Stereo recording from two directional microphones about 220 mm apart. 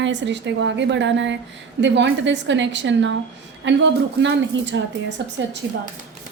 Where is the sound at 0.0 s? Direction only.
55° right (ahead or behind).